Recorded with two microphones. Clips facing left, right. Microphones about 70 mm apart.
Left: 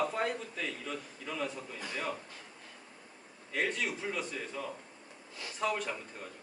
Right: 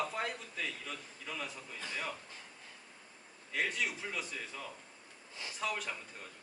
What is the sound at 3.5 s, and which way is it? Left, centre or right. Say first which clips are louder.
A man's voice: left 2 dB; centre.